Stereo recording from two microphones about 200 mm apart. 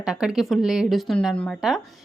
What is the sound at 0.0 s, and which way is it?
A woman's voice, 5° right (ahead or behind).